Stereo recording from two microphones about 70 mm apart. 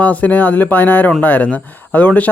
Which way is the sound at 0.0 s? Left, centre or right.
Left.